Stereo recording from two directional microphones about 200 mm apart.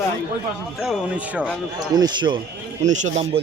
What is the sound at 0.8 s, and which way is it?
Speech, 5° right (ahead or behind).